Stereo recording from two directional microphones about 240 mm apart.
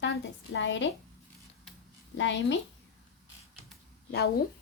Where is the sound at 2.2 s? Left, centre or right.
Left.